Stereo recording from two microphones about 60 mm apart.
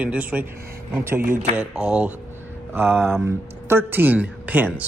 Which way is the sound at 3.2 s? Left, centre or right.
Right.